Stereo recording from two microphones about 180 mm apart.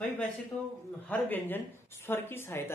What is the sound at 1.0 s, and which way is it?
Speech, 10° left (ahead or behind).